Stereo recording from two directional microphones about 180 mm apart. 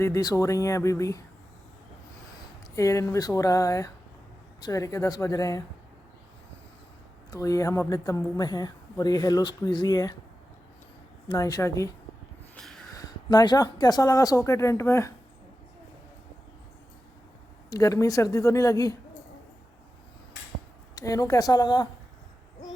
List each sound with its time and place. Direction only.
0.0 s speech: 20° left (ahead or behind)
2.7 s a woman's voice: 20° left (ahead or behind)
7.3 s a woman's voice: 20° left (ahead or behind)
11.3 s a woman's voice: 20° left (ahead or behind)
12.5 s snort: 5° left (ahead or behind)
12.9 s a woman's voice: 20° left (ahead or behind)
17.7 s a woman's voice: 20° left (ahead or behind)
20.9 s a woman's voice: 20° left (ahead or behind)